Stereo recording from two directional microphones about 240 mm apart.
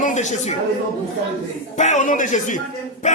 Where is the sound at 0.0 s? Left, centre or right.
Left.